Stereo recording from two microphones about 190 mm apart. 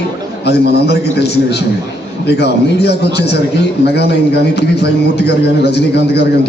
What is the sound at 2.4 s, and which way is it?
Speech, 60° left (ahead or behind).